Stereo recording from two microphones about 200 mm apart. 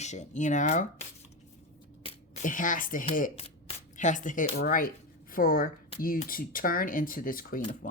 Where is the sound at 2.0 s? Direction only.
35° left (ahead or behind).